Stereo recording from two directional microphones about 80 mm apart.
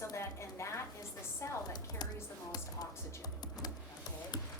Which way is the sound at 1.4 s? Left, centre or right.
Left.